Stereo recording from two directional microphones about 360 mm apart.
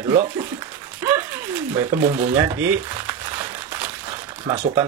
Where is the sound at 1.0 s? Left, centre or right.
Centre.